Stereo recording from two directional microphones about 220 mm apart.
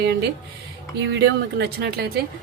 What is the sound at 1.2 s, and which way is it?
Speech, 50° right (ahead or behind).